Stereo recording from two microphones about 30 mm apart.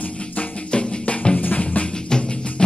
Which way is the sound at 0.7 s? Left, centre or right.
Left.